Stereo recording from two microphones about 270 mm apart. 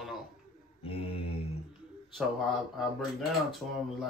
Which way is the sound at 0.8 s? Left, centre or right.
Left.